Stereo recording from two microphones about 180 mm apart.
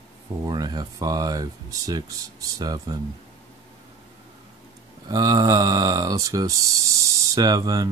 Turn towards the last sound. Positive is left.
turn(degrees=-20)  # may be behind; listen again after turning